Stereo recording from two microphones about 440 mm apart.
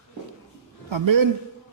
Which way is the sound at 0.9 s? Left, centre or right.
Right.